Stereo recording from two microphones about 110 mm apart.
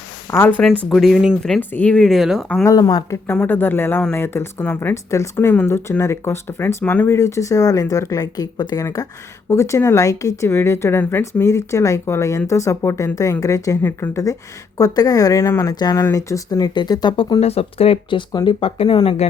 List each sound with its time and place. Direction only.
0.3 s speech: 20° left (ahead or behind)
0.9 s speech: centre (ahead or behind)
1.4 s speech: 5° left (ahead or behind)
2.6 s speech: 30° left (ahead or behind)
3.3 s speech: 15° left (ahead or behind)
7.2 s speech: 30° left (ahead or behind)
13.8 s speech: 20° left (ahead or behind)
14.8 s speech: 35° left (ahead or behind)
15.7 s speech: 40° left (ahead or behind)
16.0 s speech: 30° left (ahead or behind)
17.4 s speech: 65° left (ahead or behind)
18.3 s speech: 40° left (ahead or behind)
18.6 s speech: 60° left (ahead or behind)
19.0 s speech: 75° left (ahead or behind)